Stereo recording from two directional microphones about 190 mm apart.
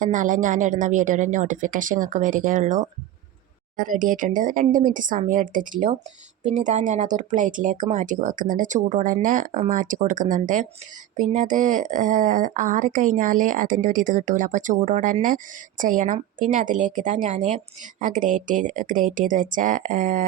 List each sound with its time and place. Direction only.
0.0 s speech: 40° right (ahead or behind)